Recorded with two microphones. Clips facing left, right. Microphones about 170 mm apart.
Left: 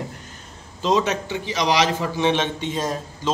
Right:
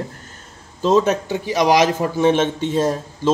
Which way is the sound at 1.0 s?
45° right (ahead or behind).